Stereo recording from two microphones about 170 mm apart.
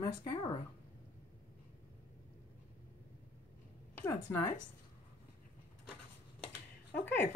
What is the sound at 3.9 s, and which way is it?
Speech, 15° left (ahead or behind).